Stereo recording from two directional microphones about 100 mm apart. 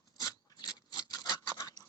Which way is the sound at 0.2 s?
40° left (ahead or behind).